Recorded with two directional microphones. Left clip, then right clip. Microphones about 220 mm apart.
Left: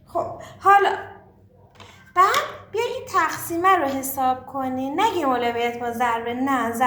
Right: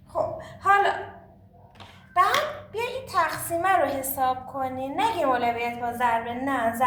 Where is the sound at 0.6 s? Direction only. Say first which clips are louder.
Left 5 dB; 25° left (ahead or behind).